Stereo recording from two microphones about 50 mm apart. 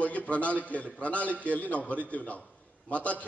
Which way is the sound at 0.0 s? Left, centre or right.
Left.